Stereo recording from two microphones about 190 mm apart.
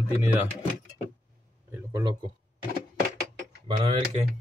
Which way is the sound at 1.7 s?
10° right (ahead or behind).